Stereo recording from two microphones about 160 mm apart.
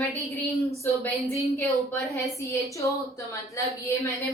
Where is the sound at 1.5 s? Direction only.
20° left (ahead or behind).